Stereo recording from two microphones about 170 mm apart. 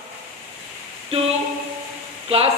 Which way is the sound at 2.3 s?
35° right (ahead or behind).